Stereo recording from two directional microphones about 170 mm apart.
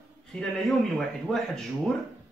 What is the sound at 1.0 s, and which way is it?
Speech, 5° left (ahead or behind).